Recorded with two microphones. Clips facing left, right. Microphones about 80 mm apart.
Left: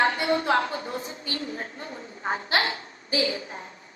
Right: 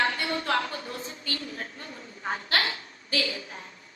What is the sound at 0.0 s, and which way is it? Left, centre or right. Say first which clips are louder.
A woman's voice: left 5 dB; left.